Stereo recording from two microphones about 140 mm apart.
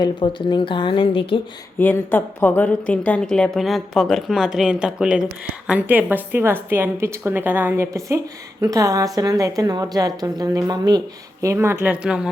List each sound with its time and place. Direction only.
0.0 s speech: 35° left (ahead or behind)
1.8 s a woman's voice: 15° left (ahead or behind); by 11.0 s 30° right (ahead or behind)
11.4 s a woman's voice: 15° right (ahead or behind)